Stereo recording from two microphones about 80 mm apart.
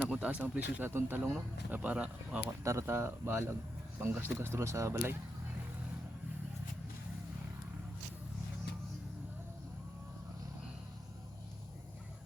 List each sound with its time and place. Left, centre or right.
0.0 s speech: centre
2.6 s speech: right